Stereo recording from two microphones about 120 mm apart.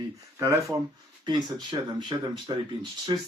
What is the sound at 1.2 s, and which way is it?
Speech, 35° right (ahead or behind).